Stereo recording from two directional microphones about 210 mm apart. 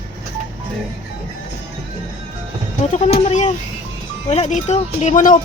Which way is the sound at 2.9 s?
35° left (ahead or behind).